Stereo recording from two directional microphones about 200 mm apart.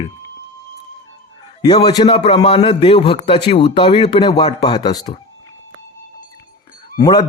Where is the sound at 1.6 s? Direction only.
20° left (ahead or behind).